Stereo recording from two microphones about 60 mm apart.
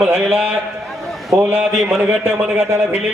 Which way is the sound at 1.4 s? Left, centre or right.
Right.